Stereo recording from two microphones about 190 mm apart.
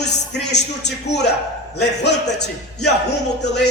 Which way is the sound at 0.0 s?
65° left (ahead or behind).